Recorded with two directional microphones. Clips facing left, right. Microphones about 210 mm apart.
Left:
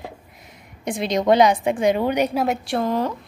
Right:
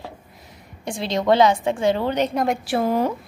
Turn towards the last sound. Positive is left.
turn(degrees=-10)  # may be behind; listen again after turning